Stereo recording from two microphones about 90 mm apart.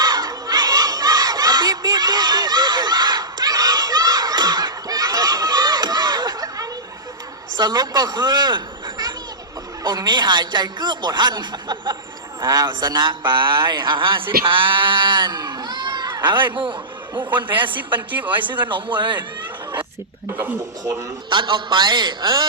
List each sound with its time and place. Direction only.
0.0 s crowd: 45° right (ahead or behind)
7.5 s a man's voice: 50° right (ahead or behind)
16.3 s a man's voice: 60° right (ahead or behind)
17.2 s a man's voice: 20° right (ahead or behind)
18.7 s a man's voice: 60° right (ahead or behind)
21.2 s a man's voice: 60° right (ahead or behind)